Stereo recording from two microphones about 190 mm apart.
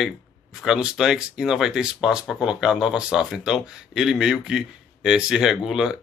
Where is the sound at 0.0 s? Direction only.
5° right (ahead or behind).